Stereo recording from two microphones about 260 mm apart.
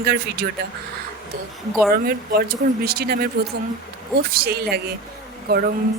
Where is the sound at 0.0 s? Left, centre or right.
Right.